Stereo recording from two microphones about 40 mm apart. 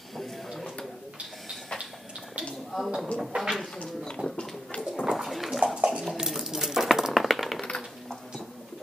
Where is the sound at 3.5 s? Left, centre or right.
Centre.